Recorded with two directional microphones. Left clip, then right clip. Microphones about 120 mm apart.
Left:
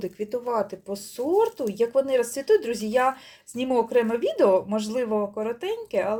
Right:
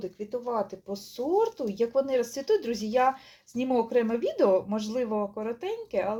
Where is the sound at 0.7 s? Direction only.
15° left (ahead or behind).